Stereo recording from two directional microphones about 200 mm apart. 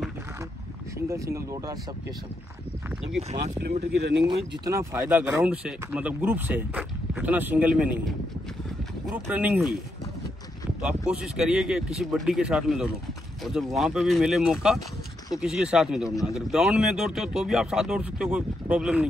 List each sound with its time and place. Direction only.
0.9 s speech: 15° right (ahead or behind)
3.2 s speech: 35° right (ahead or behind)
3.9 s speech: 55° right (ahead or behind)
4.6 s speech: 15° right (ahead or behind)
9.0 s speech: 5° right (ahead or behind)
10.8 s speech: 5° right (ahead or behind)